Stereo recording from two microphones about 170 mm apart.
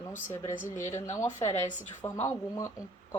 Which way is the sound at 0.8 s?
15° left (ahead or behind).